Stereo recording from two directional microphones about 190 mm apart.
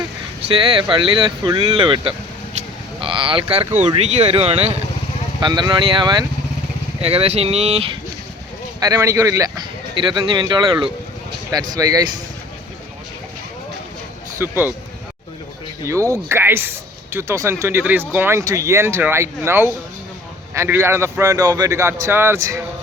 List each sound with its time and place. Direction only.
0.4 s a man's voice: 25° right (ahead or behind)
8.8 s a man's voice: 20° right (ahead or behind)
14.3 s speech: 10° right (ahead or behind)
15.8 s speech: 15° right (ahead or behind)